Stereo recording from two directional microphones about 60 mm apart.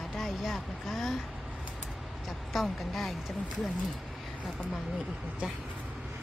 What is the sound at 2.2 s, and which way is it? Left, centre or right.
Speech, centre.